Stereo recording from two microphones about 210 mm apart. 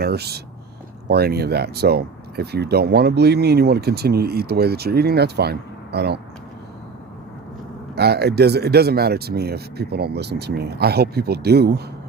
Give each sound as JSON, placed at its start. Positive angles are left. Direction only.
{"t": 0.0, "sound": "speech", "side_deg": -50}
{"t": 7.9, "sound": "speech", "side_deg": -50}